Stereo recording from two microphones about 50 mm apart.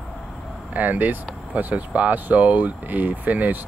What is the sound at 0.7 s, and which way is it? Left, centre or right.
Speech, right.